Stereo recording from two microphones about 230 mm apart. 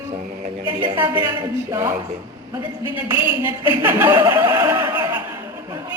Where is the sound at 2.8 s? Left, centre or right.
Left.